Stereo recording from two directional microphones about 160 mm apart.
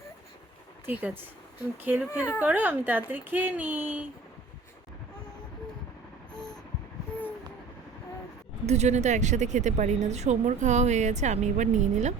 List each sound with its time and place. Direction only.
0.9 s speech: 10° right (ahead or behind)
8.6 s a woman's voice: 45° right (ahead or behind)